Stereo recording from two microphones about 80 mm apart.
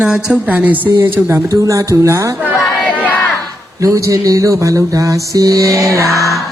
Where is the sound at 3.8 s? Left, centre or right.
Right.